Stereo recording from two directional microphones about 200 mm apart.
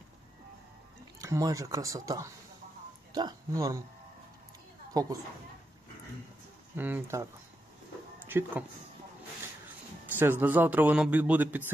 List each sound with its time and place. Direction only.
1.2 s a man's voice: 15° right (ahead or behind)
4.9 s a woman's voice: 20° right (ahead or behind)
6.8 s a man's voice: 10° right (ahead or behind)
8.3 s a man's voice: 10° right (ahead or behind)
10.1 s a man's voice: 10° right (ahead or behind)